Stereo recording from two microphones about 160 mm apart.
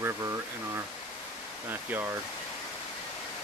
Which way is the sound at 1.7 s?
10° right (ahead or behind).